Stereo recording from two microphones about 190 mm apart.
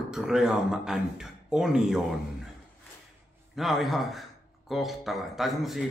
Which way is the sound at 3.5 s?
Centre (ahead or behind).